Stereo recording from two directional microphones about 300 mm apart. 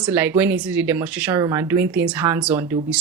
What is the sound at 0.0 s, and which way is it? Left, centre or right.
Speech, centre.